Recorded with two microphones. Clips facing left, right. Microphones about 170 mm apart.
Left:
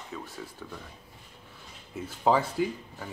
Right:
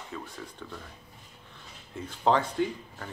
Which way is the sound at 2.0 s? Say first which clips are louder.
Even; 5° left (ahead or behind).